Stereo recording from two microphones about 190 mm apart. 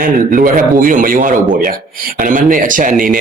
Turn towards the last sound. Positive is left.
turn(degrees=-45)  # may be behind; listen again after turning